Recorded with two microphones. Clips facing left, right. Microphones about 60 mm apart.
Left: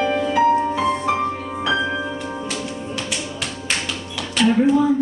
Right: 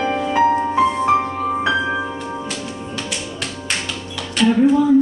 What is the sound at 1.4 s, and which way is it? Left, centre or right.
Music, right.